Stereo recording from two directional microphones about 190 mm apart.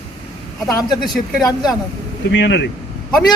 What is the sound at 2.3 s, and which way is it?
Speech, 70° left (ahead or behind).